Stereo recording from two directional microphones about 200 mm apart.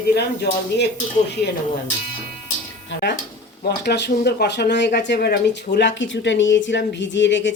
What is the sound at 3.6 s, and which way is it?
Speech, 55° left (ahead or behind).